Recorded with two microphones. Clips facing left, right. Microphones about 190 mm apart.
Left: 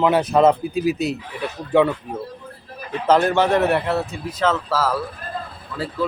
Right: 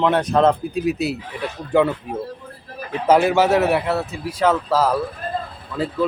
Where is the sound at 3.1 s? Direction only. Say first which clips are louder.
Right 1 dB; 10° right (ahead or behind).